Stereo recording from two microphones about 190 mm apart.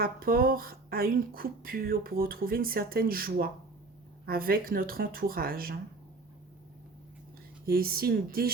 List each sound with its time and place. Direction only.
0.0 s speech: 50° right (ahead or behind)
7.7 s speech: 50° right (ahead or behind)